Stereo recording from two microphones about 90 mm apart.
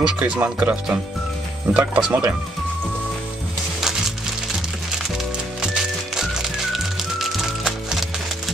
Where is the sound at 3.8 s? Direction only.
5° right (ahead or behind).